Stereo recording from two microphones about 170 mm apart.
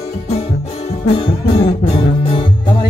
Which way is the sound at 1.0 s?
35° left (ahead or behind).